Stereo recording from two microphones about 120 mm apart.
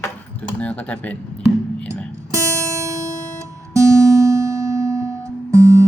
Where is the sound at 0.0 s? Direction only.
10° left (ahead or behind).